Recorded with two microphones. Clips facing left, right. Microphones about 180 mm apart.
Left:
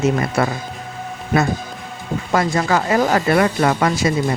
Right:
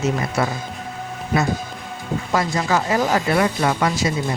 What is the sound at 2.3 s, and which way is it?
Speech, 60° left (ahead or behind).